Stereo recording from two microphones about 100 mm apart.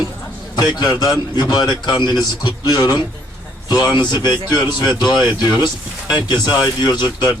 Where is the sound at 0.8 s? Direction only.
45° left (ahead or behind).